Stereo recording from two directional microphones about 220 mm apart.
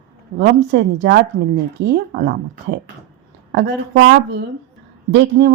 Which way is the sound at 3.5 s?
50° right (ahead or behind).